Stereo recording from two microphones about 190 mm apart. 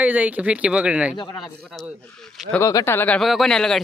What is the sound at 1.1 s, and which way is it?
Speech, 20° left (ahead or behind).